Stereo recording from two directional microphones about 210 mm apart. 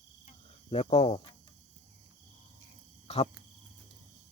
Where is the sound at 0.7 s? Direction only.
30° left (ahead or behind).